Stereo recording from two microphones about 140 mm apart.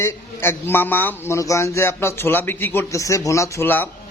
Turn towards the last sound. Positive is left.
turn(degrees=15)  # may be behind; listen again after turning